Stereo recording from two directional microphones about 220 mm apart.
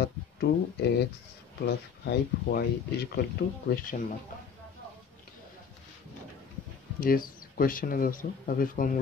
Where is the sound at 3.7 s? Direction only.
40° left (ahead or behind).